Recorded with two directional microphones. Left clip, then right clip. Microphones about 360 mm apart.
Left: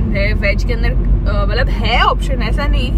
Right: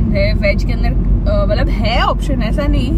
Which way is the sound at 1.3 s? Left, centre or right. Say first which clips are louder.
Right 2 dB; centre.